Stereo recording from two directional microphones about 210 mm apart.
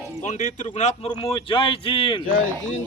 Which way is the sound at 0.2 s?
35° left (ahead or behind).